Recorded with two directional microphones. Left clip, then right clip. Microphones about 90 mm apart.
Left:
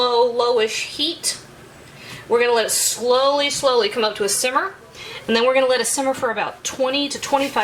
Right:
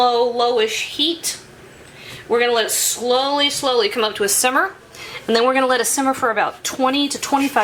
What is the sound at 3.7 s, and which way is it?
Speech, 30° right (ahead or behind).